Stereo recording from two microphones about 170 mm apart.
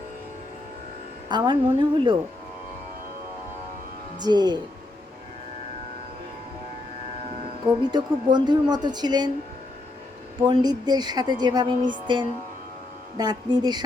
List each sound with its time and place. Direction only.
1.3 s speech: 25° right (ahead or behind)
4.2 s speech: 25° right (ahead or behind)
7.9 s speech: 25° right (ahead or behind)
10.5 s speech: 25° right (ahead or behind)